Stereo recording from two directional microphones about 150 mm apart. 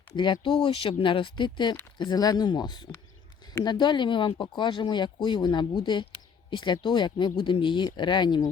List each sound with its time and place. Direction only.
0.1 s speech: 30° left (ahead or behind)